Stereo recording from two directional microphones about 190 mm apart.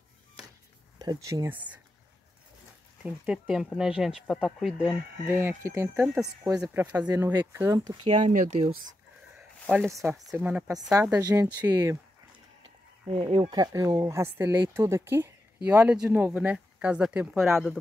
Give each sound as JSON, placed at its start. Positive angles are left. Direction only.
{"t": 0.9, "sound": "speech", "side_deg": -20}
{"t": 3.0, "sound": "speech", "side_deg": -5}
{"t": 7.0, "sound": "speech", "side_deg": -20}
{"t": 8.1, "sound": "speech", "side_deg": -40}
{"t": 9.7, "sound": "speech", "side_deg": -5}
{"t": 13.1, "sound": "speech", "side_deg": -30}